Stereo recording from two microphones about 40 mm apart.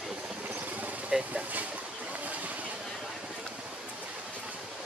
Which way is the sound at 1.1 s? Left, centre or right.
Right.